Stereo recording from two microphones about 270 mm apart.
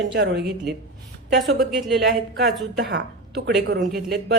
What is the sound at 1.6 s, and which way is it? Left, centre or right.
Speech, centre.